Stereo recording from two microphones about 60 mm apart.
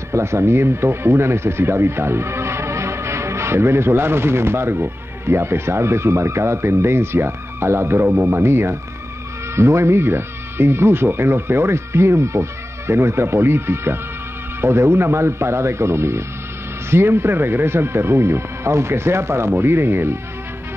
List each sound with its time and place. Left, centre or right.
0.1 s speech: right